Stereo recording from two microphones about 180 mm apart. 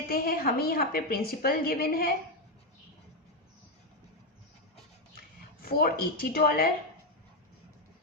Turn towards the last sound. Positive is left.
turn(degrees=55)  # may be behind; listen again after turning